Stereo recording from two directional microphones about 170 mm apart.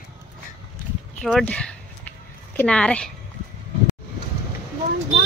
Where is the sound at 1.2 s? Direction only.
5° left (ahead or behind).